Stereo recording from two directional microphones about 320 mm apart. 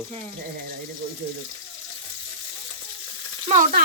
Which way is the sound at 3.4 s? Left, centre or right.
Right.